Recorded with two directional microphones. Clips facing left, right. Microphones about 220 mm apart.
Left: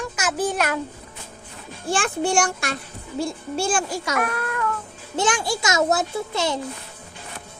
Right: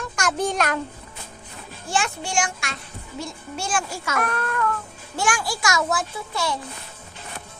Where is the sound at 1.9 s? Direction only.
55° left (ahead or behind).